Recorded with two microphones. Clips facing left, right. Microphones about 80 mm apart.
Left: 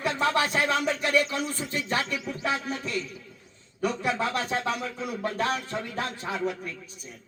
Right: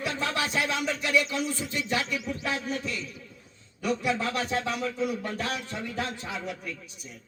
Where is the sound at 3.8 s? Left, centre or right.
Left.